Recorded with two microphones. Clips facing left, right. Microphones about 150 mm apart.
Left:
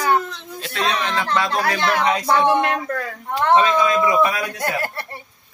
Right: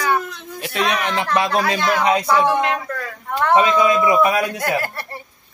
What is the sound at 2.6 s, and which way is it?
Speech, 50° left (ahead or behind).